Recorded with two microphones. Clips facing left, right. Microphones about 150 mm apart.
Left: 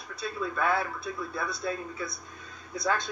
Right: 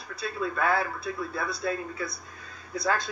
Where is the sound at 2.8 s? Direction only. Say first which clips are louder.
Right 1 dB; centre (ahead or behind).